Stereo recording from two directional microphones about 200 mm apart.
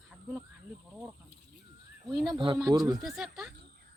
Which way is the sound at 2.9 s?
Centre (ahead or behind).